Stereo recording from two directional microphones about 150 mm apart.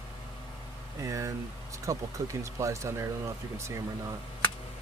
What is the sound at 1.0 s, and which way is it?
Speech, 20° right (ahead or behind).